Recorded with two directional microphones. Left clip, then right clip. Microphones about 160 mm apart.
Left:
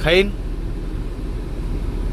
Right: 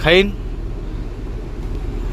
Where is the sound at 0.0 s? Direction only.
20° right (ahead or behind).